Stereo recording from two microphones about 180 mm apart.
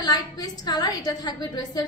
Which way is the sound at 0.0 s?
20° left (ahead or behind).